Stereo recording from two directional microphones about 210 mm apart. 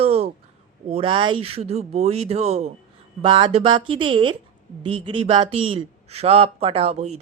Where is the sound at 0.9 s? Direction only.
25° right (ahead or behind).